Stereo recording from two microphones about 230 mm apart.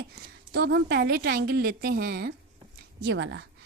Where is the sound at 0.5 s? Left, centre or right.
Right.